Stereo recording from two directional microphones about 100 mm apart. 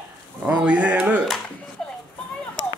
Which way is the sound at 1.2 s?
10° left (ahead or behind).